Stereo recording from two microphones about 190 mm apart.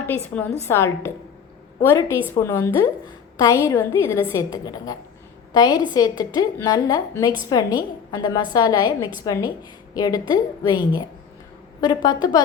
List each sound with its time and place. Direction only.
0.0 s a woman's voice: 10° left (ahead or behind)